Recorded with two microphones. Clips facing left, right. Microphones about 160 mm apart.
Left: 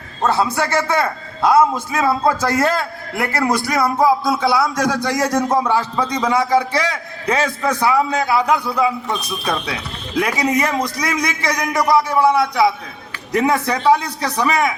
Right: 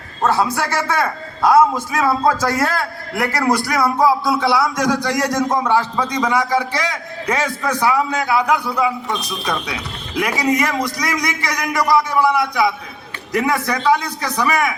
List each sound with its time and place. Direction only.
0.5 s a man's voice: 20° left (ahead or behind)
10.2 s a man's voice: 25° left (ahead or behind)